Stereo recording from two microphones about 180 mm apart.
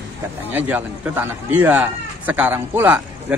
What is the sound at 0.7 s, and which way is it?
Speech, 10° right (ahead or behind).